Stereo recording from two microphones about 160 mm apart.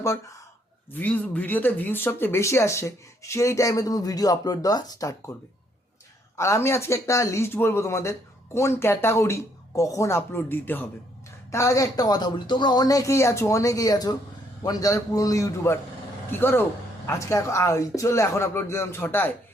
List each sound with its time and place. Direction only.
0.9 s speech: 10° left (ahead or behind)
6.3 s speech: 15° left (ahead or behind)